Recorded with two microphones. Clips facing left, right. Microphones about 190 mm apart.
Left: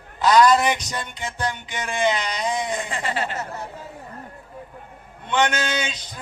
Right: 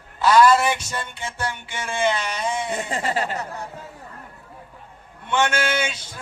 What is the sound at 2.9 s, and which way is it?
Speech, 40° right (ahead or behind).